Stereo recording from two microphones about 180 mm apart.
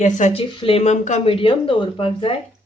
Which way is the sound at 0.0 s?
40° left (ahead or behind).